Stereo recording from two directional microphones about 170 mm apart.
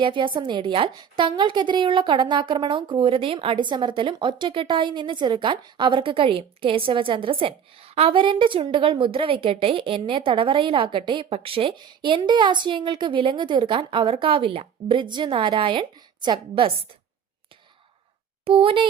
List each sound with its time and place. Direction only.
0.0 s a woman's voice: 30° right (ahead or behind)
18.4 s a woman's voice: 30° right (ahead or behind)